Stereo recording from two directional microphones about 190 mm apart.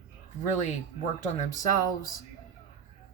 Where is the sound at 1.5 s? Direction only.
20° left (ahead or behind).